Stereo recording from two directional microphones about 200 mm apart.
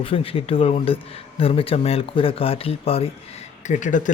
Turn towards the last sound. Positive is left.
turn(degrees=40)  # may be behind; listen again after turning